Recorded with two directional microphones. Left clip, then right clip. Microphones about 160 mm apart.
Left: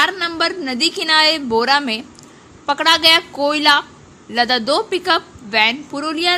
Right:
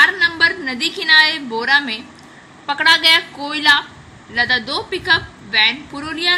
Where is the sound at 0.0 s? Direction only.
55° left (ahead or behind).